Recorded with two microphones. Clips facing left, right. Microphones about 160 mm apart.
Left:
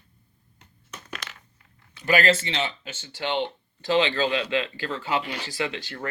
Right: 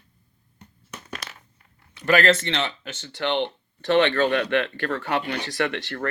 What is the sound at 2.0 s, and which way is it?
Speech, 60° right (ahead or behind).